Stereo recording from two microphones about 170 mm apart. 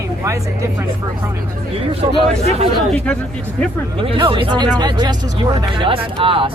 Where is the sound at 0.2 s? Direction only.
15° right (ahead or behind).